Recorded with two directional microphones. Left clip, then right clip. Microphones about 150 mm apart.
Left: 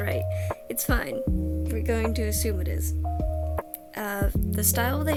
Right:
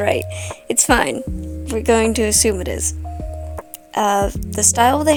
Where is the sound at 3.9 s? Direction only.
45° right (ahead or behind).